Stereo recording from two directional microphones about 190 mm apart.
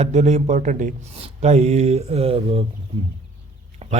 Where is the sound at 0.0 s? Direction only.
35° right (ahead or behind).